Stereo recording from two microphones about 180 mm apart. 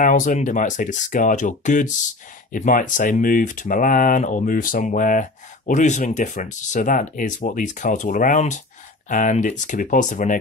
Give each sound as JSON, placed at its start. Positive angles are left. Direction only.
{"t": 0.0, "sound": "speech", "side_deg": 45}